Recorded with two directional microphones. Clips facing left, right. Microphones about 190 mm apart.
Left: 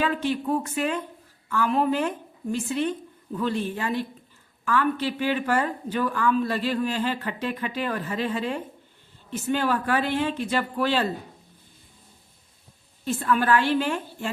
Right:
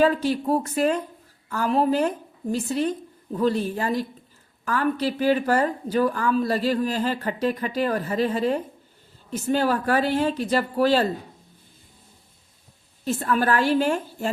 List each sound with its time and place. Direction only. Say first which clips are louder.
0.0 s speech: right 5 dB; 40° right (ahead or behind)
13.1 s speech: even; 40° right (ahead or behind)